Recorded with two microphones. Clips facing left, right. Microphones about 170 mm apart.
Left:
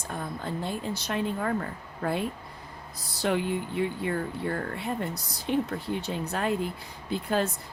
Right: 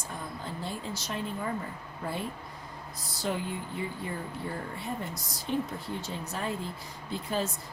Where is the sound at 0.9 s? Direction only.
65° left (ahead or behind).